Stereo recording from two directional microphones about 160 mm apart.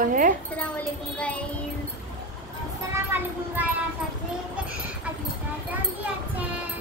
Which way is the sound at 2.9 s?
10° right (ahead or behind).